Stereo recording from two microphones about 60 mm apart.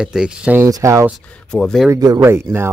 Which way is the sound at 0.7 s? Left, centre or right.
Right.